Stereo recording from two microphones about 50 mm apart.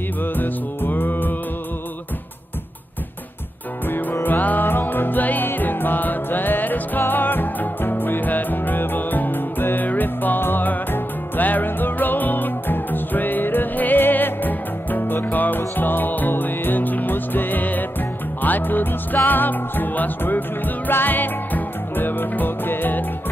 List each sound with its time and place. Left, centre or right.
0.2 s music: left
3.8 s music: left